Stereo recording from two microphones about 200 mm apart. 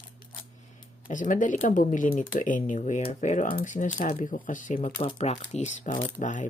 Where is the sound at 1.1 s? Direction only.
40° left (ahead or behind).